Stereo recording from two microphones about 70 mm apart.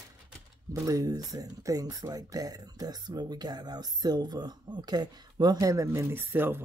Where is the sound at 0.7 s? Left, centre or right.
Right.